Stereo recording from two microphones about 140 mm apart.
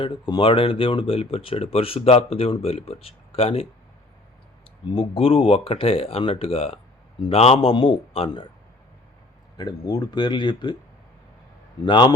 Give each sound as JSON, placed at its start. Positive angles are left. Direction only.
{"t": 0.0, "sound": "speech", "side_deg": 35}
{"t": 4.9, "sound": "speech", "side_deg": 40}
{"t": 9.6, "sound": "speech", "side_deg": 30}
{"t": 11.9, "sound": "speech", "side_deg": 35}